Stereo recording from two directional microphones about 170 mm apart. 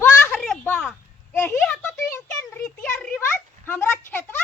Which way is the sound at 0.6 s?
10° left (ahead or behind).